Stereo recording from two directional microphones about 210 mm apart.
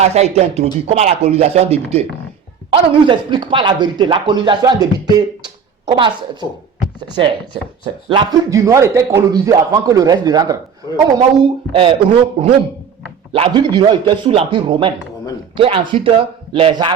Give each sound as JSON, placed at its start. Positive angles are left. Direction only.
{"t": 0.0, "sound": "speech", "side_deg": -30}
{"t": 8.1, "sound": "a man's voice", "side_deg": -15}